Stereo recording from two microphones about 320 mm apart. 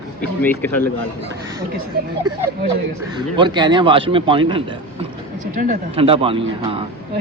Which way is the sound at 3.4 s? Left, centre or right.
Centre.